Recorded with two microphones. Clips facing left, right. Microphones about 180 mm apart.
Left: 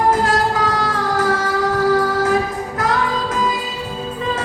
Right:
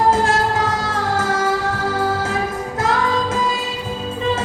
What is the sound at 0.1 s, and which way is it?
Music, 25° right (ahead or behind).